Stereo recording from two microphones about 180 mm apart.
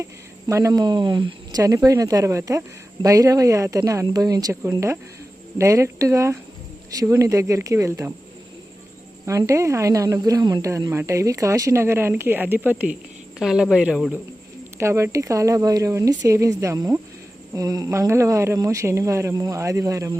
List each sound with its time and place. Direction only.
0.0 s speech: 15° right (ahead or behind)
9.2 s speech: 15° right (ahead or behind)
14.8 s speech: 15° right (ahead or behind)